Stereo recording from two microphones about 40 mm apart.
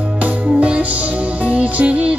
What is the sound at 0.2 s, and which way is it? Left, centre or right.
Music, right.